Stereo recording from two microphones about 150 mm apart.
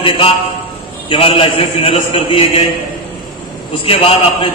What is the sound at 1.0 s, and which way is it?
A man's voice, 35° left (ahead or behind).